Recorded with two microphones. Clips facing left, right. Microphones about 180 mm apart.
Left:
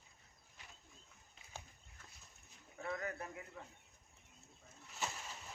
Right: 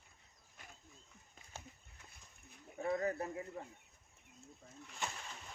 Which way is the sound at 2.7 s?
30° right (ahead or behind).